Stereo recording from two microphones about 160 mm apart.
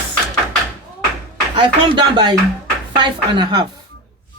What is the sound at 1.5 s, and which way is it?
Speech, 30° right (ahead or behind).